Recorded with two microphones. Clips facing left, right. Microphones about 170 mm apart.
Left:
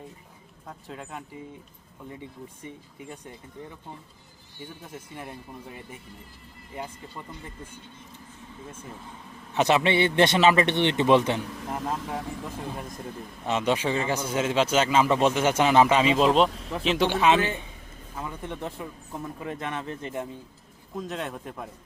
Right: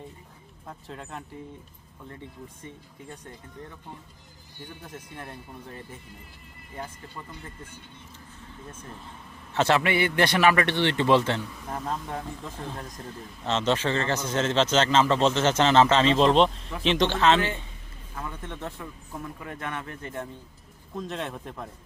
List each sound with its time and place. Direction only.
0.7 s a man's voice: centre (ahead or behind)
2.6 s speech: 10° left (ahead or behind)
4.8 s speech: 10° left (ahead or behind)
9.5 s a man's voice: 15° left (ahead or behind)
13.4 s speech: 10° left (ahead or behind)
17.1 s a man's voice: 10° left (ahead or behind)
20.9 s a man's voice: centre (ahead or behind)